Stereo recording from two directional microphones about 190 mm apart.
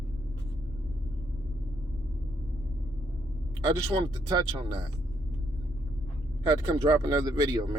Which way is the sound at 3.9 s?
25° right (ahead or behind).